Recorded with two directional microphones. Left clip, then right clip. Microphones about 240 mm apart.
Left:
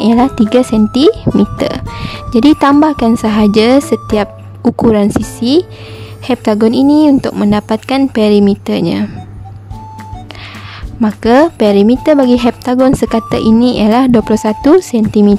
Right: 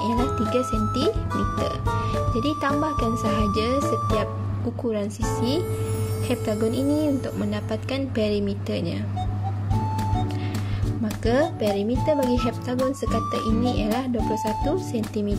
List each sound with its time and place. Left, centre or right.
0.0 s a woman's voice: left
11.0 s a woman's voice: left